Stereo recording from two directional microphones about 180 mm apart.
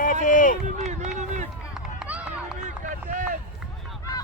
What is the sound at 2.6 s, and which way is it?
Run, 45° right (ahead or behind).